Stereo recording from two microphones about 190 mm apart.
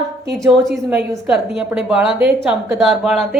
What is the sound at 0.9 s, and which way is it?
A woman's voice, 5° right (ahead or behind).